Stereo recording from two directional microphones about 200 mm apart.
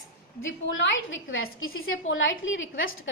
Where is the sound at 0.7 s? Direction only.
70° left (ahead or behind).